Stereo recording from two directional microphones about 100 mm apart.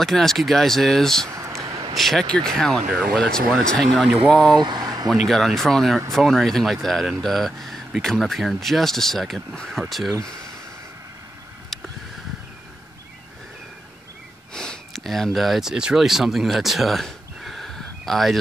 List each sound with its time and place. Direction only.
0.0 s speech: 5° left (ahead or behind)
1.3 s a sound: 30° right (ahead or behind)
2.0 s speech: centre (ahead or behind)
4.6 s speech: 45° right (ahead or behind)
5.1 s speech: centre (ahead or behind)
11.7 s vehicle: 5° left (ahead or behind)
14.5 s speech: 5° left (ahead or behind)